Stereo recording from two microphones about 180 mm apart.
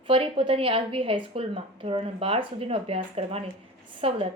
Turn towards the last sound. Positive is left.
turn(degrees=-30)  # may be behind; listen again after turning